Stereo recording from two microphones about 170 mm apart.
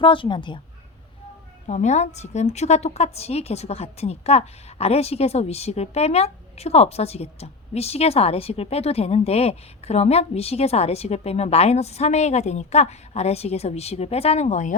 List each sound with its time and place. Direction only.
0.0 s a woman's voice: 30° left (ahead or behind)
1.6 s a woman's voice: 45° left (ahead or behind)